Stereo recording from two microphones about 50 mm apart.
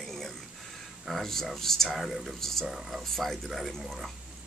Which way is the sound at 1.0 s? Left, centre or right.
Centre.